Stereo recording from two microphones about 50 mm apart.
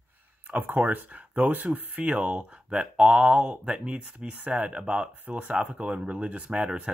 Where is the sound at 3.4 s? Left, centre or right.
Centre.